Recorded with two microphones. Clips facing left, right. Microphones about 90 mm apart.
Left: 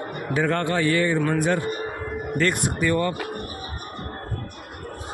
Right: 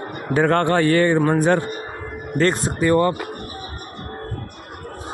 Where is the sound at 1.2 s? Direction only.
40° right (ahead or behind).